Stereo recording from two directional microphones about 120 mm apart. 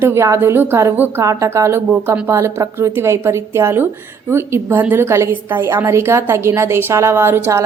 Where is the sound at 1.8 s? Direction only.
10° right (ahead or behind).